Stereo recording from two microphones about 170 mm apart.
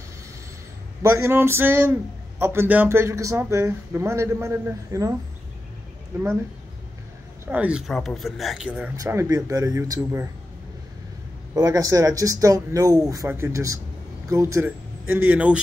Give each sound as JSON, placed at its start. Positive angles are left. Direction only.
{"t": 1.0, "sound": "a man's voice", "side_deg": -15}
{"t": 6.1, "sound": "a man's voice", "side_deg": -15}
{"t": 7.4, "sound": "speech", "side_deg": -10}
{"t": 8.9, "sound": "speech", "side_deg": -15}
{"t": 11.5, "sound": "a man's voice", "side_deg": -20}